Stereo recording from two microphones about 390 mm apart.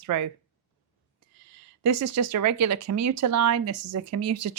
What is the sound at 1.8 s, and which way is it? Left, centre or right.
Speech, right.